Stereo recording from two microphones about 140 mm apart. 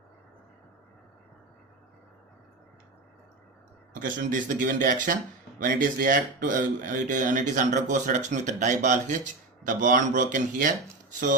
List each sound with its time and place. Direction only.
3.9 s a man's voice: 75° right (ahead or behind)